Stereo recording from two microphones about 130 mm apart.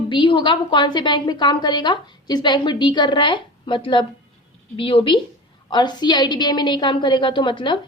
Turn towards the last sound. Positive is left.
turn(degrees=40)  # may be behind; listen again after turning